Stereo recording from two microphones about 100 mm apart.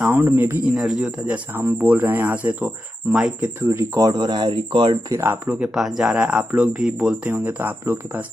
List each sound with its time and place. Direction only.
0.0 s speech: 20° right (ahead or behind)
0.7 s speech: 5° right (ahead or behind)
3.6 s speech: 35° right (ahead or behind)
4.1 s speech: 45° right (ahead or behind)
5.1 s speech: 25° right (ahead or behind)
5.5 s speech: 5° right (ahead or behind)